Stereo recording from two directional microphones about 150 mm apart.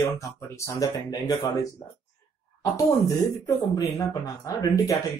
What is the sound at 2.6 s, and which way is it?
Speech, 20° left (ahead or behind).